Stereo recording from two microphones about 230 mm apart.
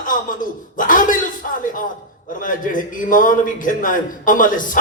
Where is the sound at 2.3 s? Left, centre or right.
Left.